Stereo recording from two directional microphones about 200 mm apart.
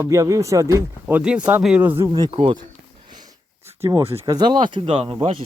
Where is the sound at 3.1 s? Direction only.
20° right (ahead or behind).